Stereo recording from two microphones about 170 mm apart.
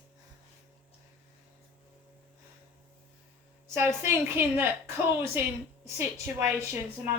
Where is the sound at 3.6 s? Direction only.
15° right (ahead or behind).